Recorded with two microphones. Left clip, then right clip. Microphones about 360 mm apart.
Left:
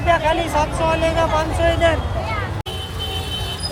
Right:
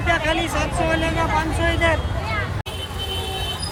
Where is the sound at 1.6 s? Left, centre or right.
Centre.